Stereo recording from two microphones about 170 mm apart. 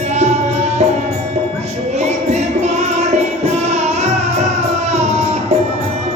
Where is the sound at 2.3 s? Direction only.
40° right (ahead or behind).